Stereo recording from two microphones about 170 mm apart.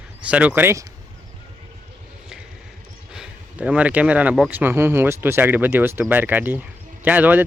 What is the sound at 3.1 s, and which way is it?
Speech, 5° right (ahead or behind).